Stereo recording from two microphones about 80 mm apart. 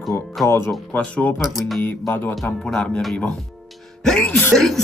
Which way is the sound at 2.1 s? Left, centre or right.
Left.